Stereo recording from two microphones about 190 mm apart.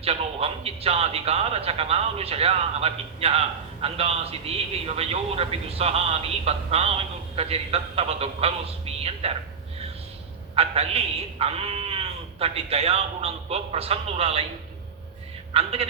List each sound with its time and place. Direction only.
0.0 s speech: 30° right (ahead or behind)
10.5 s speech: 30° right (ahead or behind)
15.5 s speech: 30° right (ahead or behind)